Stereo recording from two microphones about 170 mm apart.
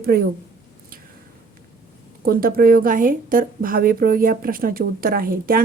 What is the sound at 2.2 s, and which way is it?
A woman's voice, 60° right (ahead or behind).